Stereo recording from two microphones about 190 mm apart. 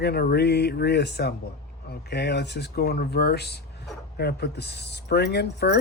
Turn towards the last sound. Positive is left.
turn(degrees=60)  # may be behind; listen again after turning